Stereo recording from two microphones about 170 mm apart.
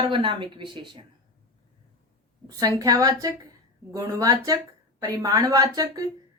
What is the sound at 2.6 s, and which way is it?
A woman's voice, 20° right (ahead or behind).